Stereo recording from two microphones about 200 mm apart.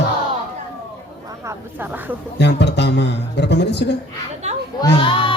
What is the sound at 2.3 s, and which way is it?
Speech, 60° left (ahead or behind).